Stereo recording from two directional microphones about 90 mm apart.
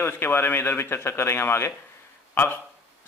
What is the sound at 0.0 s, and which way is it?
A man's voice, 25° left (ahead or behind).